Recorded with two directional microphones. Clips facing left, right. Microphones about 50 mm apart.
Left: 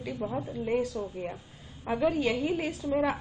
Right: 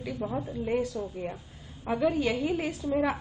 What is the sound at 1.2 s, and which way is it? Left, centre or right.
Speech, left.